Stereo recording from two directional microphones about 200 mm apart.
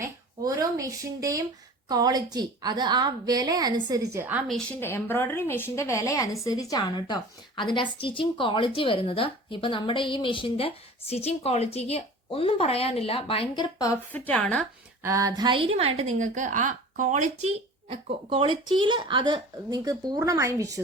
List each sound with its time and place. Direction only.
0.0 s a sound: 15° right (ahead or behind)
1.9 s a woman's voice: 20° right (ahead or behind)
4.4 s a woman's voice: 5° left (ahead or behind)
15.0 s a woman's voice: 15° right (ahead or behind)